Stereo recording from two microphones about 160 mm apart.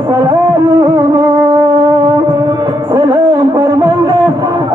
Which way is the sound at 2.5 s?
25° right (ahead or behind).